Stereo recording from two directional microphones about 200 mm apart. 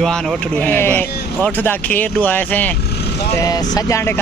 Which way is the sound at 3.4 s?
20° left (ahead or behind).